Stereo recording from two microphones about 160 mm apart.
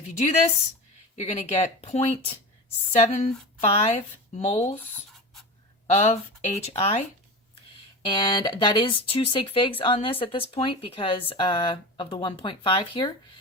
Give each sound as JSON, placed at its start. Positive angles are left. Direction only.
{"t": 1.1, "sound": "speech", "side_deg": 45}
{"t": 5.9, "sound": "speech", "side_deg": 40}
{"t": 8.0, "sound": "speech", "side_deg": 30}